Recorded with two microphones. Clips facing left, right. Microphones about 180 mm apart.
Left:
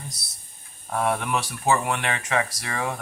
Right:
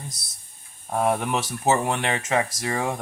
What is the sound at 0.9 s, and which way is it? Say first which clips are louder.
Speech: right 2 dB; 20° right (ahead or behind).